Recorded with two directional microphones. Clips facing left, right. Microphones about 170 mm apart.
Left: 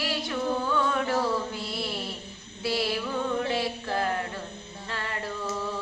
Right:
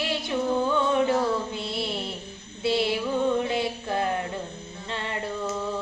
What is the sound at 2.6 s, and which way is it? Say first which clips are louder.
Mantra: right 4 dB; 20° right (ahead or behind).